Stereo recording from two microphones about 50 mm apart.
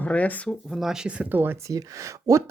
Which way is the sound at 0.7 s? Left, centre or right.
Centre.